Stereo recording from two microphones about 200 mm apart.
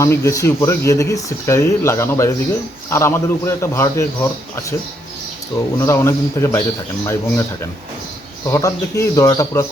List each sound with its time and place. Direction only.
0.0 s speech: 15° left (ahead or behind)
5.7 s speech: 15° left (ahead or behind)
8.4 s speech: 15° left (ahead or behind)